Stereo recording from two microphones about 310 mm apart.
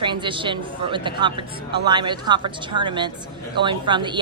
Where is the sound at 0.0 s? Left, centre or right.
Centre.